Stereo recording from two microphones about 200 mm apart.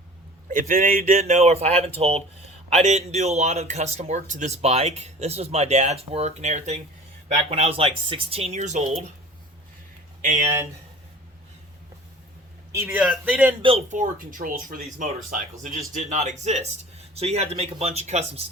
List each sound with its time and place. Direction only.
0.4 s a man's voice: 40° right (ahead or behind)
10.2 s speech: 40° right (ahead or behind)
12.7 s a man's voice: 10° right (ahead or behind)
13.6 s speech: 30° right (ahead or behind)